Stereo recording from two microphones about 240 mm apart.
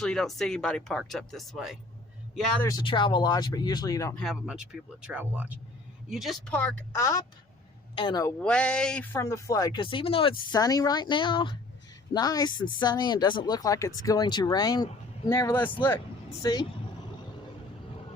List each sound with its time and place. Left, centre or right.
0.0 s speech: centre
2.6 s speech: centre
8.4 s speech: centre